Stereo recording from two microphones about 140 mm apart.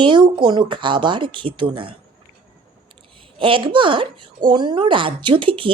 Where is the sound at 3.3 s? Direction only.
40° right (ahead or behind).